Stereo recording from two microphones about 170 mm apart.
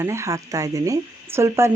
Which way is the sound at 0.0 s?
15° right (ahead or behind).